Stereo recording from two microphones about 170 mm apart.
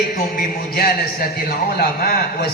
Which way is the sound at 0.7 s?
60° left (ahead or behind).